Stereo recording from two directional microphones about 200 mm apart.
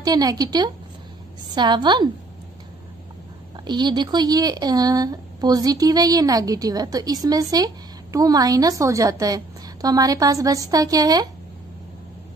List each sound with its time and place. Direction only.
0.0 s speech: 20° right (ahead or behind)
3.5 s speech: 20° right (ahead or behind)